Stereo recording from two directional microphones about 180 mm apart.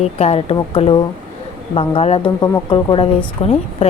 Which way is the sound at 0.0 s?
35° left (ahead or behind).